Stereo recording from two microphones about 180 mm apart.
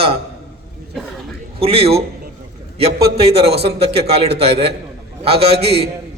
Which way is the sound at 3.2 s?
35° right (ahead or behind).